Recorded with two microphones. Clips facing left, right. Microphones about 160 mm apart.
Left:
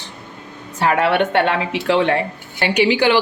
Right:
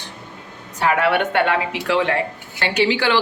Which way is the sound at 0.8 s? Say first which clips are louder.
Left 2 dB; 25° left (ahead or behind).